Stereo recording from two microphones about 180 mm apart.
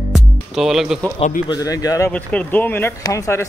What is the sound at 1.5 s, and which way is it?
Speech, 20° left (ahead or behind).